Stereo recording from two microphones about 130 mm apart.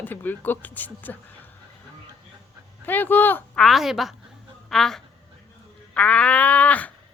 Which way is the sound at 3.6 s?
Centre (ahead or behind).